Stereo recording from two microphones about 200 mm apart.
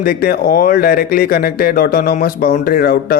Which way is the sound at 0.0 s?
50° left (ahead or behind).